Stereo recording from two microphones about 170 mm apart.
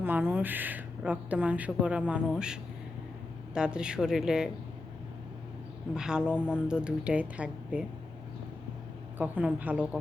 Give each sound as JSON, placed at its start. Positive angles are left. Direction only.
{"t": 0.0, "sound": "speech", "side_deg": -10}
{"t": 5.9, "sound": "speech", "side_deg": -5}
{"t": 9.1, "sound": "speech", "side_deg": -10}